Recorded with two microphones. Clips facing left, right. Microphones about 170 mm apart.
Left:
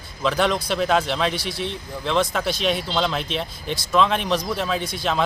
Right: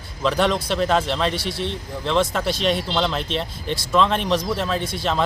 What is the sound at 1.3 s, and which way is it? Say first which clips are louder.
Speech: right 2 dB; 30° right (ahead or behind).